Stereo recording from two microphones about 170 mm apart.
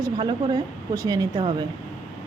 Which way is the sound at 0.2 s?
35° right (ahead or behind).